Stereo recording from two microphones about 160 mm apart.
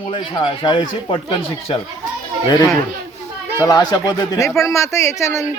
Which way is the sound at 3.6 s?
20° left (ahead or behind).